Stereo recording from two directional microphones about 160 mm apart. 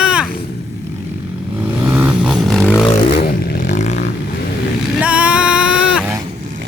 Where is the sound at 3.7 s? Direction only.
45° left (ahead or behind).